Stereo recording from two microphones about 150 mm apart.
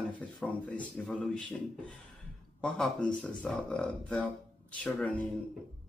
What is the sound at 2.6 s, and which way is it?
Speech, 5° left (ahead or behind).